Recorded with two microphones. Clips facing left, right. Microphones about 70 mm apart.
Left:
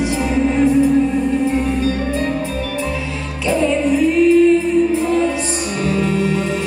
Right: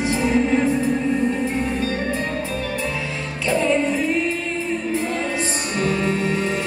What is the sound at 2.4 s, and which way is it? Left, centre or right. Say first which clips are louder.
Music: left 3 dB; left.